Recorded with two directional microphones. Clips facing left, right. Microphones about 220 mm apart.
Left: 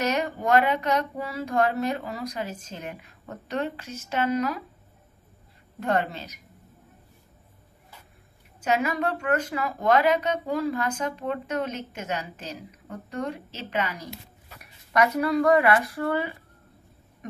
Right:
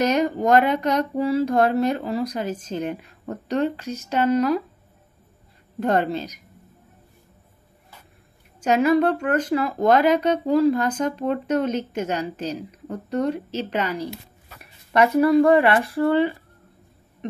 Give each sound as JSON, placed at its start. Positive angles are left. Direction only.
{"t": 0.0, "sound": "speech", "side_deg": -40}
{"t": 5.8, "sound": "speech", "side_deg": -40}
{"t": 8.6, "sound": "speech", "side_deg": -35}